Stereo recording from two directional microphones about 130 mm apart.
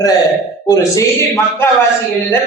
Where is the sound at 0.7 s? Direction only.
25° left (ahead or behind).